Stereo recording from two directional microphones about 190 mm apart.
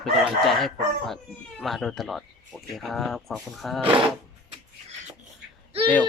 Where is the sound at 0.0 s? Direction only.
Centre (ahead or behind).